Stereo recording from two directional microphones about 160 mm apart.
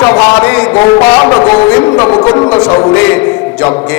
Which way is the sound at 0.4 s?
10° left (ahead or behind).